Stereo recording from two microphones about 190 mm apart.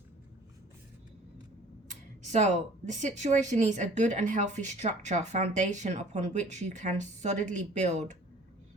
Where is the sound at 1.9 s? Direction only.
40° right (ahead or behind).